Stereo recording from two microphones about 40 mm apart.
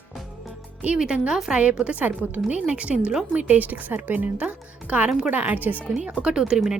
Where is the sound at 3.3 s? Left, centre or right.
Right.